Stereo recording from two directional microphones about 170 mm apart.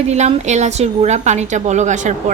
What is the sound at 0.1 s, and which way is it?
A woman's voice, 40° right (ahead or behind).